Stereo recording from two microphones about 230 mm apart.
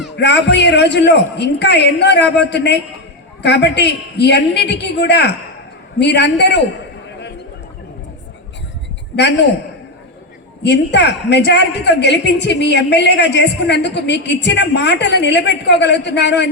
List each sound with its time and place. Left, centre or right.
0.2 s a woman's voice: left
9.1 s a woman's voice: left
10.6 s a woman's voice: left